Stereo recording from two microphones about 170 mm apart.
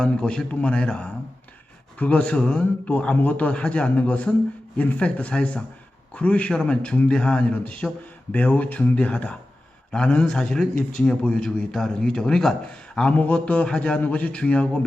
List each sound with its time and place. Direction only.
0.0 s a man's voice: 5° left (ahead or behind)